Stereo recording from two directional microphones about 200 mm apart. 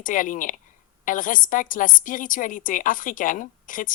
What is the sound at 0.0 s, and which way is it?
A woman's voice, 40° left (ahead or behind).